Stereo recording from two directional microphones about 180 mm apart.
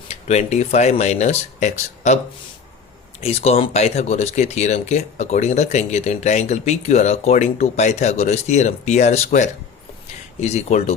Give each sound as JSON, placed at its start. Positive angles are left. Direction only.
{"t": 0.1, "sound": "speech", "side_deg": 40}
{"t": 3.2, "sound": "speech", "side_deg": 35}